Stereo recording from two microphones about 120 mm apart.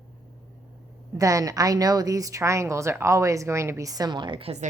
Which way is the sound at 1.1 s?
30° right (ahead or behind).